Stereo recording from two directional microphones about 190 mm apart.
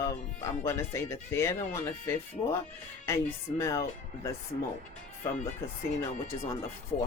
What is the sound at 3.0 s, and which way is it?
Speech, 15° left (ahead or behind).